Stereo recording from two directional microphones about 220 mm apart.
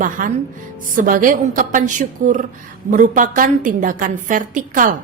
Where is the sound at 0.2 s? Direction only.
40° right (ahead or behind).